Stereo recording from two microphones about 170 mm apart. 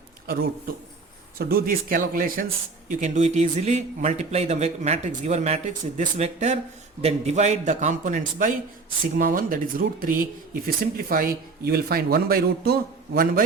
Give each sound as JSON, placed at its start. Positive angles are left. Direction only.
{"t": 1.4, "sound": "speech", "side_deg": -60}
{"t": 3.0, "sound": "a man's voice", "side_deg": -40}